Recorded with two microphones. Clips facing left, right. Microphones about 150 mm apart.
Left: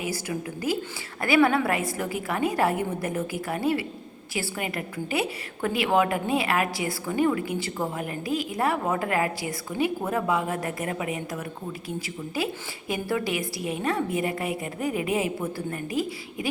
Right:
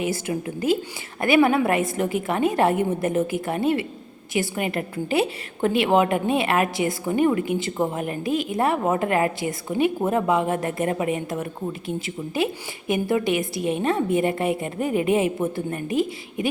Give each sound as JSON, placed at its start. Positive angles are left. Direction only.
{"t": 0.0, "sound": "a woman's voice", "side_deg": -25}